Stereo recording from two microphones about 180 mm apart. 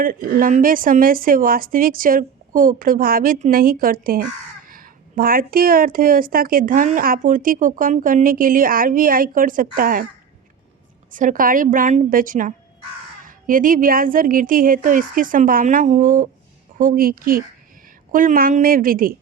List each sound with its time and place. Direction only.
0.0 s a woman's voice: 50° right (ahead or behind)
11.1 s a woman's voice: 45° right (ahead or behind)